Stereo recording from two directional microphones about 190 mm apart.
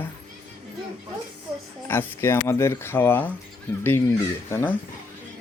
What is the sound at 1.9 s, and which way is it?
Speech, 10° left (ahead or behind).